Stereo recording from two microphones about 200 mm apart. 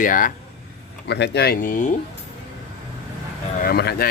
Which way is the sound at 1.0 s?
55° left (ahead or behind).